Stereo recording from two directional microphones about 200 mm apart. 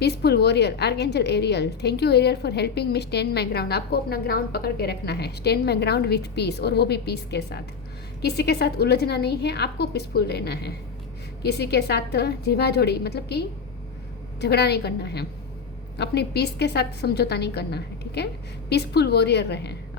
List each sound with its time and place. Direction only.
0.0 s a woman's voice: 55° left (ahead or behind)
14.4 s a woman's voice: 55° left (ahead or behind)